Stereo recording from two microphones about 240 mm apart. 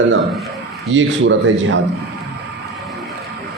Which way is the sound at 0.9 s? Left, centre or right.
Right.